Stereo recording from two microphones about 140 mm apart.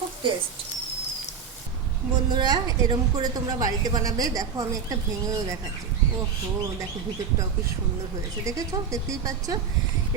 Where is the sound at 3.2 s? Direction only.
25° right (ahead or behind).